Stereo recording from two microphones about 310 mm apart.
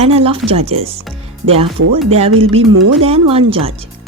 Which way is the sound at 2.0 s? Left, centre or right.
Centre.